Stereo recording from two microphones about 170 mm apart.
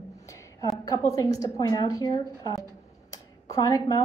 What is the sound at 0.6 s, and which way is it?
Speech, 20° left (ahead or behind).